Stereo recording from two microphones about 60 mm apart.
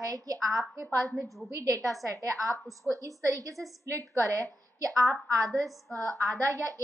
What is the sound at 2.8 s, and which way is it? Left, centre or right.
A woman's voice, right.